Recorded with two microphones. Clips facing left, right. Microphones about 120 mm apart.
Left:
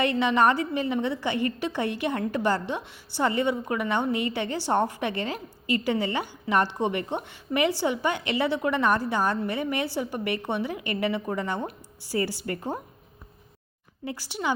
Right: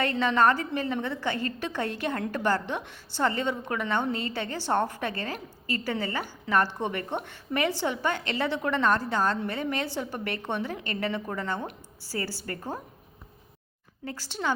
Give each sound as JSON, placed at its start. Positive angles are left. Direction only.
{"t": 0.0, "sound": "a woman's voice", "side_deg": 15}
{"t": 14.0, "sound": "a woman's voice", "side_deg": 15}